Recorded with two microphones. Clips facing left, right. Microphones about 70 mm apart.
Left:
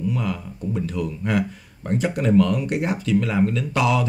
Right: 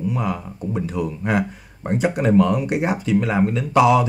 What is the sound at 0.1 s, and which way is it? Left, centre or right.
Speech, centre.